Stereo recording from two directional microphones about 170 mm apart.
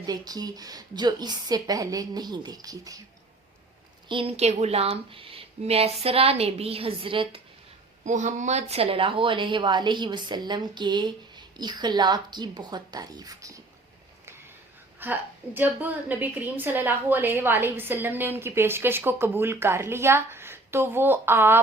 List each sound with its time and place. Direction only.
0.0 s speech: 25° right (ahead or behind)
4.1 s a woman's voice: 35° right (ahead or behind)
8.0 s speech: 45° right (ahead or behind); by 13.6 s 20° right (ahead or behind)
14.9 s a woman's voice: 10° right (ahead or behind)